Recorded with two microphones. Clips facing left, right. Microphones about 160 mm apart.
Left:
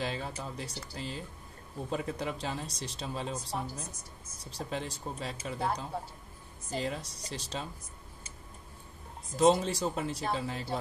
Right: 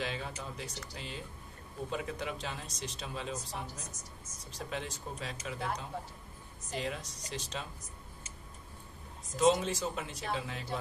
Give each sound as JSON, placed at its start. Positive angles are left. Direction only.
{"t": 0.0, "sound": "speech", "side_deg": 35}
{"t": 9.4, "sound": "speech", "side_deg": 35}